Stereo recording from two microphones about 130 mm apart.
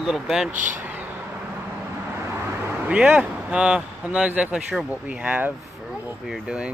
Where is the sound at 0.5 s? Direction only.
80° right.